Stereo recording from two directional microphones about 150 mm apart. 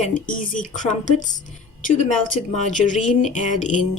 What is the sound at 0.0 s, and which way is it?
Speech, 60° left (ahead or behind).